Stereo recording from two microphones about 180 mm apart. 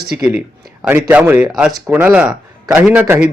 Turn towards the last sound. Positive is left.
turn(degrees=-15)  # may be behind; listen again after turning